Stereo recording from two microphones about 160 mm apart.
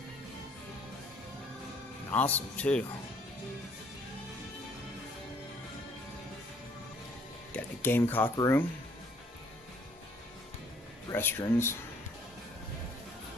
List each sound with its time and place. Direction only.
2.0 s a man's voice: 10° left (ahead or behind)
7.5 s a man's voice: 10° left (ahead or behind)
11.1 s a man's voice: 15° left (ahead or behind)